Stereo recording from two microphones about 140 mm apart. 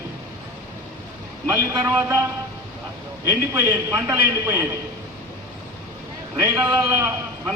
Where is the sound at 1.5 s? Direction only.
20° right (ahead or behind).